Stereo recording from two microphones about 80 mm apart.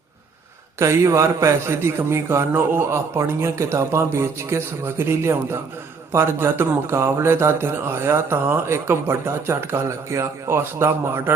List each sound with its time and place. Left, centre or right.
0.8 s speech: right